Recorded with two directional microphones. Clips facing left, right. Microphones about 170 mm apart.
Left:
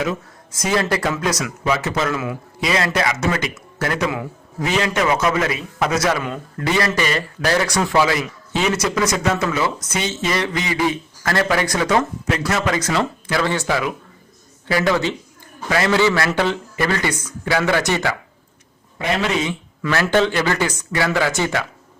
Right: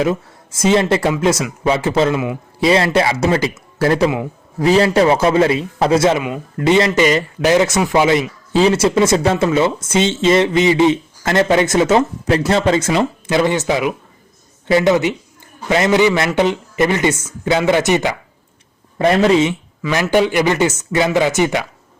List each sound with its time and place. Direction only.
0.0 s a man's voice: 30° right (ahead or behind)
18.9 s a man's voice: 35° right (ahead or behind)
19.9 s a man's voice: 15° right (ahead or behind)